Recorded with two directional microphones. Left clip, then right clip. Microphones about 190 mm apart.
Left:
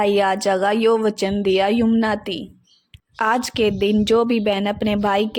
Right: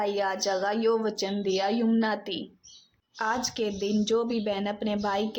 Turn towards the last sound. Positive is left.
turn(degrees=40)  # may be behind; listen again after turning